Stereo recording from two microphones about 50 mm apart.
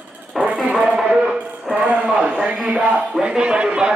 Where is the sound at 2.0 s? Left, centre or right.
Right.